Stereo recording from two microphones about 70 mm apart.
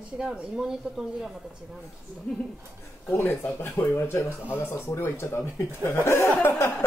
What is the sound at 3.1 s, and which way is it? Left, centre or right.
Speech, left.